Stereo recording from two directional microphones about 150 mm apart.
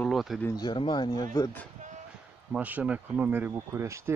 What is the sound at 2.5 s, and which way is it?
Speech, 10° right (ahead or behind).